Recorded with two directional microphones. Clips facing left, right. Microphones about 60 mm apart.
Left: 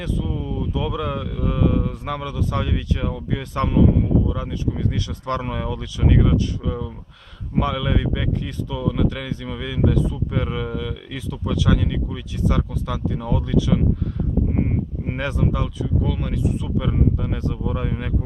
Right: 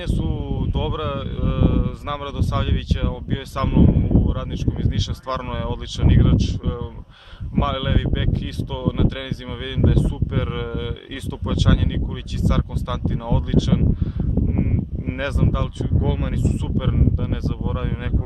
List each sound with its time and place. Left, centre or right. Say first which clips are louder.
0.6 s speech: left 1 dB; centre
5.4 s speech: left 1 dB; centre
15.0 s speech: right 1 dB; centre
16.0 s speech: right 1 dB; centre
17.2 s speech: even; centre